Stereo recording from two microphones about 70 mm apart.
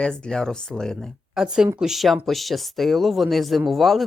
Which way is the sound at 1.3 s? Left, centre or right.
Centre.